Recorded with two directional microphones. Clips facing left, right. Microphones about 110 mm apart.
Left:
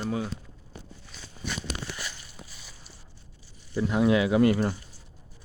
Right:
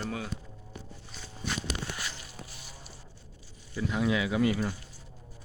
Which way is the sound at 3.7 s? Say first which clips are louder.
Left 6 dB; 45° left (ahead or behind).